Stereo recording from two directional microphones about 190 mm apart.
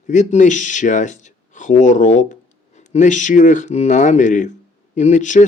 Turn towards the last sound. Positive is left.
turn(degrees=40)  # may be behind; listen again after turning